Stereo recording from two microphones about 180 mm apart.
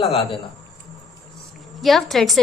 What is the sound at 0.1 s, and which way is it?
Speech, 35° left (ahead or behind).